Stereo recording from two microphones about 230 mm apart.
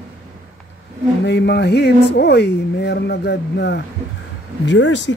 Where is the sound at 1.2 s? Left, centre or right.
Left.